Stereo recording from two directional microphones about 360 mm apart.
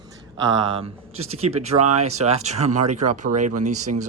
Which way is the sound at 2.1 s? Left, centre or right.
Centre.